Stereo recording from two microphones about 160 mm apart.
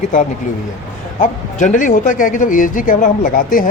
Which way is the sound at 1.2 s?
50° left (ahead or behind).